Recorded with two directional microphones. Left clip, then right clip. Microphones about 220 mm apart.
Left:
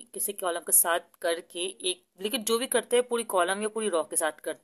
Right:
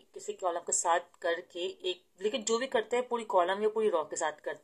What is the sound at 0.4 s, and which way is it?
Speech, 45° left (ahead or behind).